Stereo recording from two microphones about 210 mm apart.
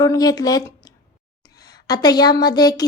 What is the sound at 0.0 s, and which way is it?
Speech, 15° left (ahead or behind).